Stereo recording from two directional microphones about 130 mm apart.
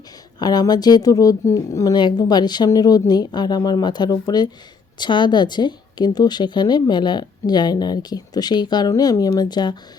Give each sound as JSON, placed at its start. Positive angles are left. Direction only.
{"t": 0.3, "sound": "speech", "side_deg": 30}